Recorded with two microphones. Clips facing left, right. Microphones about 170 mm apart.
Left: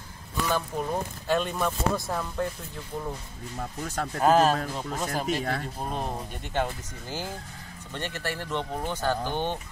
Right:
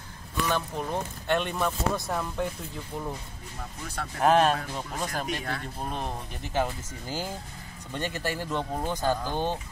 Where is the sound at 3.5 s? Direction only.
45° left (ahead or behind).